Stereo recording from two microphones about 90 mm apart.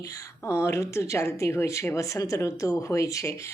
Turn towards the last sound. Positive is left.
turn(degrees=35)  # may be behind; listen again after turning